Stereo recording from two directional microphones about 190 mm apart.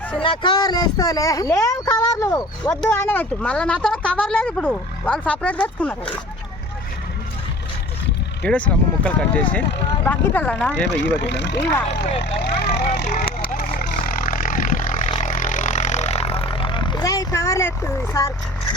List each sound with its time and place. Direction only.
0.2 s speech: 25° left (ahead or behind); by 6.0 s 10° left (ahead or behind)
8.4 s speech: 5° left (ahead or behind)
10.8 s speech: 65° left (ahead or behind)
12.2 s vehicle: 65° left (ahead or behind); by 18.3 s 15° left (ahead or behind)